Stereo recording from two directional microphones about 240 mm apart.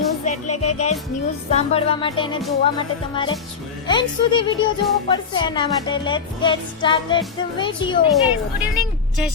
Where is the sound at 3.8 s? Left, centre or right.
Centre.